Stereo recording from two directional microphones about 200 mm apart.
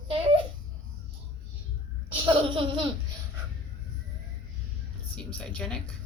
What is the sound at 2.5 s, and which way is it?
Laughter, 25° right (ahead or behind).